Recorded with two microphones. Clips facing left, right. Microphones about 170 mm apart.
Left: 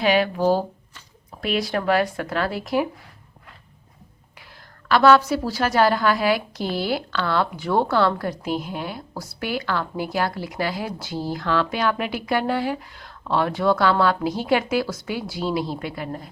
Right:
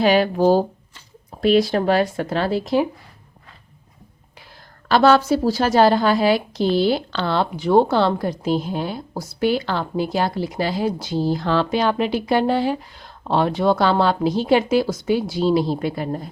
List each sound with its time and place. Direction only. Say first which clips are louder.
0.0 s a woman's voice: right 4 dB; 35° right (ahead or behind)
4.9 s a woman's voice: right 1 dB; 30° right (ahead or behind)